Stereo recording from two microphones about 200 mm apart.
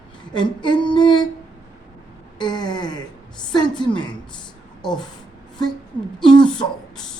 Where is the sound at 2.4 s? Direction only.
20° left (ahead or behind).